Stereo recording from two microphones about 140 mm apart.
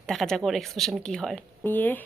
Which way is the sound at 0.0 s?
Centre (ahead or behind).